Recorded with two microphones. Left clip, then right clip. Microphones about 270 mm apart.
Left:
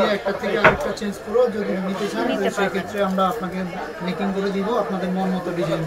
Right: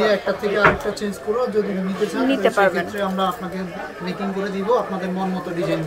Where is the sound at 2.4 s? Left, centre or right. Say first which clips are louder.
Right 5 dB; centre.